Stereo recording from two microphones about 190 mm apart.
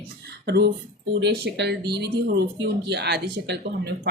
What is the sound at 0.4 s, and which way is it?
Speech, 60° right (ahead or behind).